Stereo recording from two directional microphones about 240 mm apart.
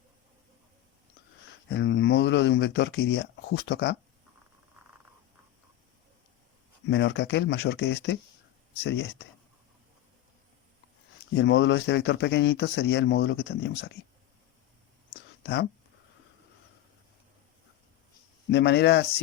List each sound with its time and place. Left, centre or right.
1.7 s speech: left
6.8 s speech: left
11.3 s speech: left
18.5 s speech: left